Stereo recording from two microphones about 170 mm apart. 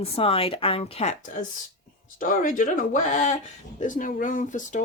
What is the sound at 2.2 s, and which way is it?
Speech, 50° left (ahead or behind).